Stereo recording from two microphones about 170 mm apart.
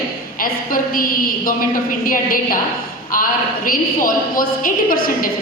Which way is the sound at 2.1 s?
55° left (ahead or behind).